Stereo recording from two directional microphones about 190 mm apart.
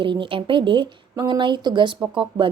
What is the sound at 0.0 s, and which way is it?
A woman's voice, 25° right (ahead or behind).